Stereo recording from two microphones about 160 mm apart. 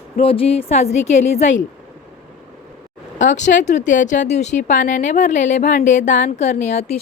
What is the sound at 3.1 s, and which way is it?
Speech, 50° left (ahead or behind).